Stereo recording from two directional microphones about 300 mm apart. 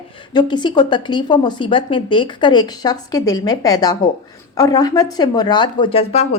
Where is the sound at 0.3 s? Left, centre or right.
Centre.